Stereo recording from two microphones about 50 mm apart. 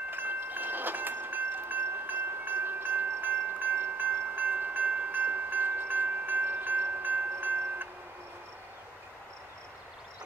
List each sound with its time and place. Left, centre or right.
0.1 s wind chime: right